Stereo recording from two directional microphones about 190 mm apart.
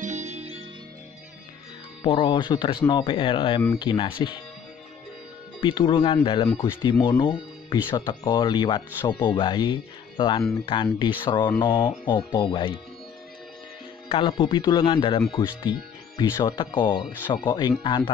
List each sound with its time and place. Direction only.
0.0 s music: 35° right (ahead or behind)
2.0 s speech: 25° left (ahead or behind)
5.6 s speech: 25° left (ahead or behind)
14.0 s speech: 30° left (ahead or behind)